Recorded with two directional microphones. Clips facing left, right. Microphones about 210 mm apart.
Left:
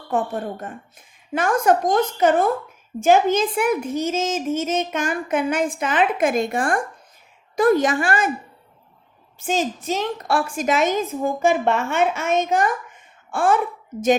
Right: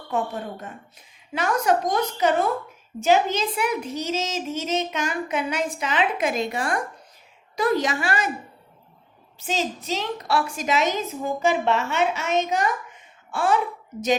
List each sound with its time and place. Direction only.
0.1 s speech: 50° left (ahead or behind)
9.4 s speech: 50° left (ahead or behind)